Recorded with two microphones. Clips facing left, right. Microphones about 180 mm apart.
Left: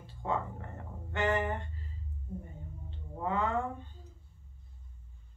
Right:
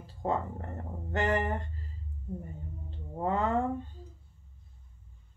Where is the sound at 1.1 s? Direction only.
40° right (ahead or behind).